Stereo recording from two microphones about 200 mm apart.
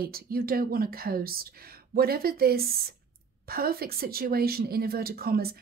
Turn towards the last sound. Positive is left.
turn(degrees=-50)  # may be behind; listen again after turning